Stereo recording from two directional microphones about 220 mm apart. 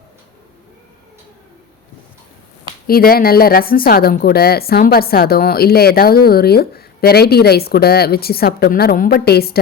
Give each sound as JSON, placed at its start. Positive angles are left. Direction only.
{"t": 2.8, "sound": "speech", "side_deg": 45}